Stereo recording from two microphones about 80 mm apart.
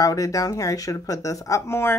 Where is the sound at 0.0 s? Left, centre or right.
Left.